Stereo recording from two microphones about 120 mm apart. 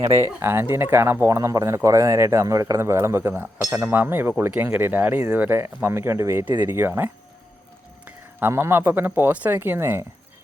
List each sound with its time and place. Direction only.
0.3 s speech: 20° right (ahead or behind)